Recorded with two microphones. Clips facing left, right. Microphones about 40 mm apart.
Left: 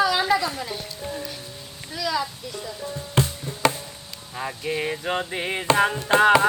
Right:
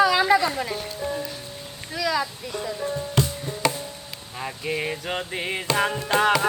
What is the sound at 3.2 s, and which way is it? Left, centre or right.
Music, left.